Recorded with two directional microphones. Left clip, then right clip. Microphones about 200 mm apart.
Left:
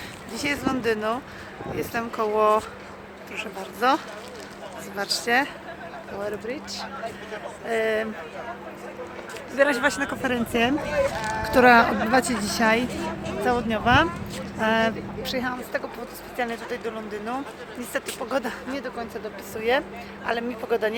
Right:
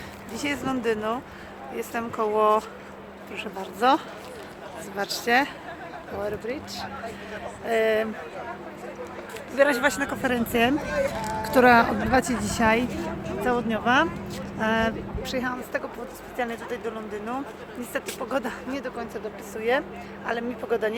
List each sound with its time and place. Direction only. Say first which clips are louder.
0.3 s speech: left 2 dB; centre (ahead or behind)
3.3 s speech: even; 15° right (ahead or behind)
9.6 s speech: even; 5° right (ahead or behind)
11.9 s speech: left 2 dB; 25° left (ahead or behind)
12.1 s speech: left 1 dB; 5° right (ahead or behind)